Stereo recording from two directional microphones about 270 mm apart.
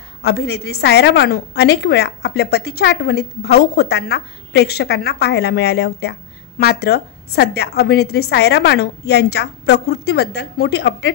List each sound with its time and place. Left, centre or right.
0.2 s a woman's voice: left